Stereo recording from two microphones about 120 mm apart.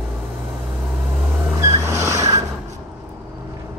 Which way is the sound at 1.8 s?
25° right (ahead or behind).